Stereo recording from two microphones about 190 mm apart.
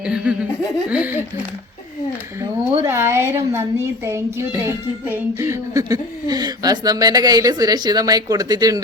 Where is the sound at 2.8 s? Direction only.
15° right (ahead or behind).